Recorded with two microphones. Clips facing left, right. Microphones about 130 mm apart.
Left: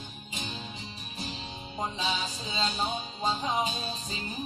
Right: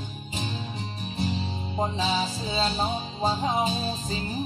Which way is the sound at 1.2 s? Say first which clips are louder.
Right 9 dB; 35° right (ahead or behind).